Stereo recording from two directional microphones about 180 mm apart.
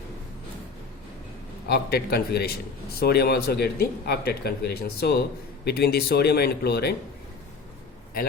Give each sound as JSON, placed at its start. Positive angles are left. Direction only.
{"t": 1.6, "sound": "speech", "side_deg": 65}